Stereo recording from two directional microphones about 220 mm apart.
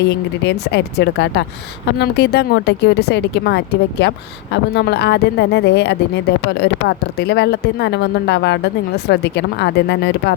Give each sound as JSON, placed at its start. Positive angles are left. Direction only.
{"t": 0.1, "sound": "speech", "side_deg": 50}